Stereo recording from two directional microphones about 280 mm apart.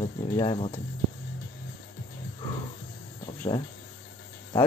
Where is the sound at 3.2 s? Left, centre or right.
Centre.